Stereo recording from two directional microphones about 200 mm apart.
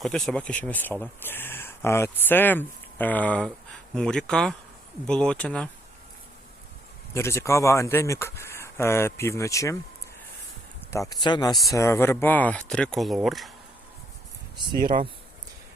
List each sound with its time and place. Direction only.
0.0 s speech: centre (ahead or behind)
7.1 s speech: 15° left (ahead or behind)
10.9 s speech: 15° left (ahead or behind); by 13.5 s centre (ahead or behind)
14.8 s speech: 45° right (ahead or behind)